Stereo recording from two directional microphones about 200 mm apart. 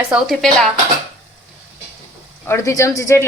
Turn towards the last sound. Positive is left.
turn(degrees=15)  # may be behind; listen again after turning